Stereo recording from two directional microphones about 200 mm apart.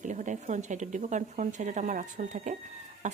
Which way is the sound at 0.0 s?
40° right (ahead or behind).